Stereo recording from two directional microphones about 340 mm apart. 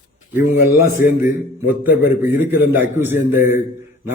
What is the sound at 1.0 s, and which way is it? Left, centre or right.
Speech, left.